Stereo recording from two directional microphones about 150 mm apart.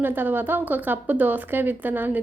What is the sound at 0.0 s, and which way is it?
A woman's voice, 15° right (ahead or behind).